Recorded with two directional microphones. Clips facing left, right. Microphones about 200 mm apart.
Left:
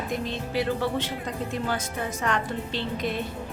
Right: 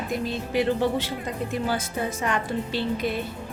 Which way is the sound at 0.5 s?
15° right (ahead or behind).